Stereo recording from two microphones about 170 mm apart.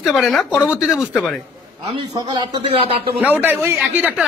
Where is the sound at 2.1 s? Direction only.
25° right (ahead or behind).